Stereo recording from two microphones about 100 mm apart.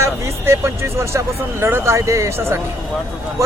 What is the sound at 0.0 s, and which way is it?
A man's voice, 25° right (ahead or behind).